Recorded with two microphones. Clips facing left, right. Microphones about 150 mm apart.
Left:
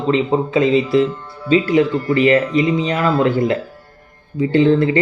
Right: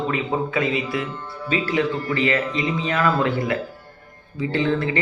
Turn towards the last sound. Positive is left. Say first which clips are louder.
# left 8 dB
turn(degrees=25)  # may be behind; listen again after turning